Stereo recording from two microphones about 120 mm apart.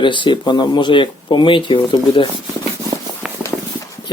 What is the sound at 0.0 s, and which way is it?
Speech, 40° left (ahead or behind).